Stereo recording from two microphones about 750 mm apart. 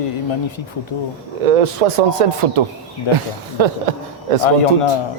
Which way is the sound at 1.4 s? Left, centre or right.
Right.